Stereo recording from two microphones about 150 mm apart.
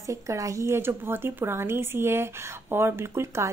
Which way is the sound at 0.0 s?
20° right (ahead or behind).